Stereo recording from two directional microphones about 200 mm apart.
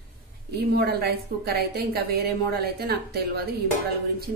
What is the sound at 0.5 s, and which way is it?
A woman's voice, 50° right (ahead or behind).